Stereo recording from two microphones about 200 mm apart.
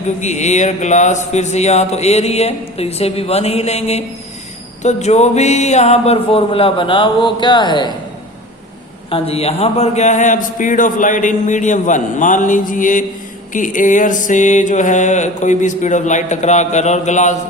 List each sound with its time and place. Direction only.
0.2 s a man's voice: 35° left (ahead or behind)
9.0 s a man's voice: 30° left (ahead or behind)